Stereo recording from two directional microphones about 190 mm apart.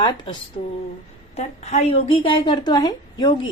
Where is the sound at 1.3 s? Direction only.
35° left (ahead or behind).